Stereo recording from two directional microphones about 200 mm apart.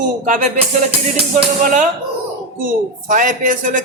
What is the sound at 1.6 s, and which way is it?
Speech, 40° right (ahead or behind).